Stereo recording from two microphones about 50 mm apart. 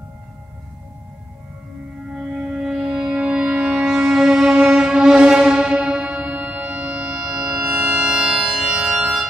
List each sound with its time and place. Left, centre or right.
2.1 s music: centre
3.2 s music: right
7.2 s music: centre